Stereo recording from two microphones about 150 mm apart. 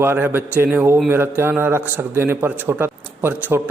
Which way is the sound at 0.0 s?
15° right (ahead or behind).